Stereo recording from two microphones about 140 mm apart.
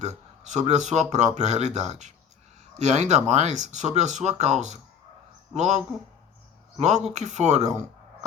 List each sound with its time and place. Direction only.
0.0 s speech: 55° right (ahead or behind)